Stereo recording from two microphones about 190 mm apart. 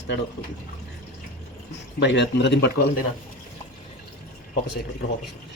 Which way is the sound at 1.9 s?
65° left (ahead or behind).